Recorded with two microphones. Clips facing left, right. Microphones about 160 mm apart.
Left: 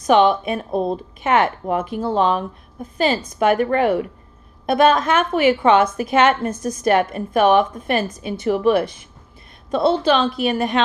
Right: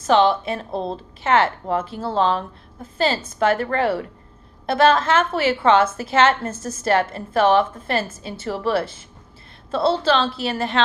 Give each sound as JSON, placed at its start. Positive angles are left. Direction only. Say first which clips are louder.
{"t": 0.0, "sound": "a woman's voice", "louder": "left 2 dB", "side_deg": 15}